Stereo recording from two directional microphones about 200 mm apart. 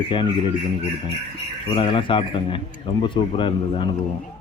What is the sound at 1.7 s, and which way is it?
Speech, 25° left (ahead or behind).